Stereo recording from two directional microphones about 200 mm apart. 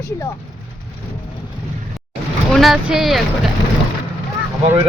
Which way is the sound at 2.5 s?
Centre (ahead or behind).